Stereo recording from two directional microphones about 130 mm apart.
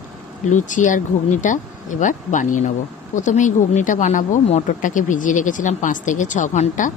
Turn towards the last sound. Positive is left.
turn(degrees=70)  # may be behind; listen again after turning